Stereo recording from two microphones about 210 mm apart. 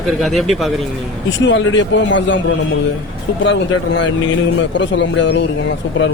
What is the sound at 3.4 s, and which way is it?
A man's voice, 60° left (ahead or behind).